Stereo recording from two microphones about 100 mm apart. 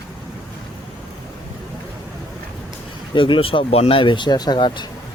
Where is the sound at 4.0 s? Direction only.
55° left (ahead or behind).